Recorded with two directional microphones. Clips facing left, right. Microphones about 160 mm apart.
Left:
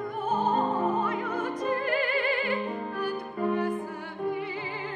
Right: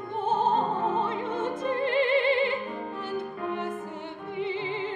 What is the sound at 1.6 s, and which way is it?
Music, 25° right (ahead or behind).